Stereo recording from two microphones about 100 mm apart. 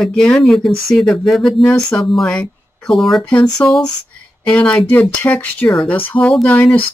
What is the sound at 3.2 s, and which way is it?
Speech, 15° left (ahead or behind).